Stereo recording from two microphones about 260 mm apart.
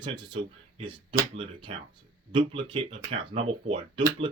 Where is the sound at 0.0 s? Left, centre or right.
Centre.